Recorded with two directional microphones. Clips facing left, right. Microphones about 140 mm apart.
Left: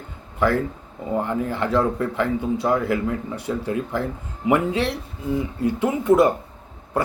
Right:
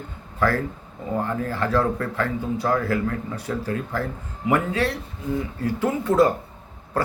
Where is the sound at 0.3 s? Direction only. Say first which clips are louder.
Left 2 dB; 20° left (ahead or behind).